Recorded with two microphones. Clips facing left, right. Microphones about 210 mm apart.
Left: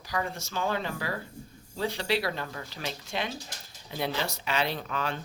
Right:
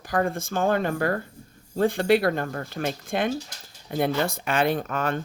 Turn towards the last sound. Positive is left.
turn(degrees=-50)  # may be behind; listen again after turning